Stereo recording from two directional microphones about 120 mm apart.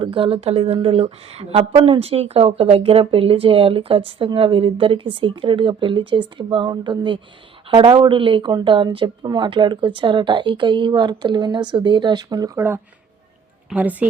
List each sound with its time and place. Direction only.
0.0 s speech: 45° right (ahead or behind)
12.5 s a woman's voice: 20° right (ahead or behind)